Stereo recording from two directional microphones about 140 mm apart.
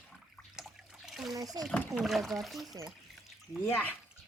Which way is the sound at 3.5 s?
15° left (ahead or behind).